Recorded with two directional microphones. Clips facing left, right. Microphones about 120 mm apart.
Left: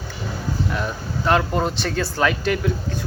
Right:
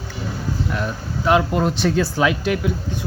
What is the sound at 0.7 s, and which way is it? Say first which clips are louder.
Speech: right 1 dB; centre (ahead or behind).